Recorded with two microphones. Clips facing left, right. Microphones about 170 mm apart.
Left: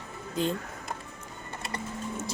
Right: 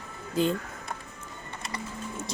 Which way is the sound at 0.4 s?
5° right (ahead or behind).